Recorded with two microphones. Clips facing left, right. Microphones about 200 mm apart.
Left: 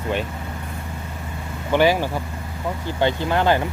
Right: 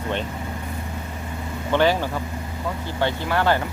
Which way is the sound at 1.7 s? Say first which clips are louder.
Left 2 dB; 10° left (ahead or behind).